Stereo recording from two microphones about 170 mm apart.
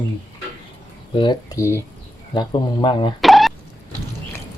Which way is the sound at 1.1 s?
30° left (ahead or behind).